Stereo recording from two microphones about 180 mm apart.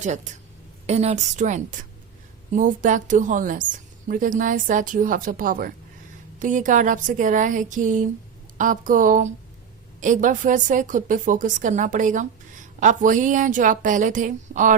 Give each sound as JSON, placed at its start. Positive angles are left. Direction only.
{"t": 0.0, "sound": "a woman's voice", "side_deg": -40}